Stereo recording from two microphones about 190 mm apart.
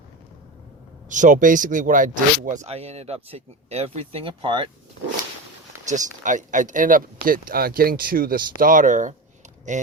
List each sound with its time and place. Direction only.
1.1 s speech: 40° right (ahead or behind); by 4.7 s 25° right (ahead or behind)
5.9 s speech: 40° right (ahead or behind)